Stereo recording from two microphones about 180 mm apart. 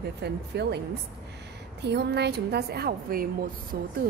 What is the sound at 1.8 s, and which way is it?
A woman's voice, 70° right (ahead or behind).